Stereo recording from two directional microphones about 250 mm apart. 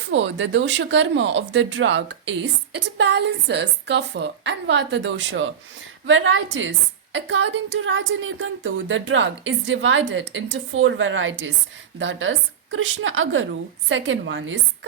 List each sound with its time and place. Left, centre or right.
0.1 s a woman's voice: right